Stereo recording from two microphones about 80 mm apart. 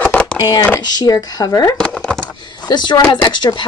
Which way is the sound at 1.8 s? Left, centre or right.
Centre.